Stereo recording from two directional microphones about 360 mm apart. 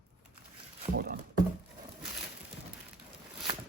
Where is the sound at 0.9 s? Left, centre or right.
Right.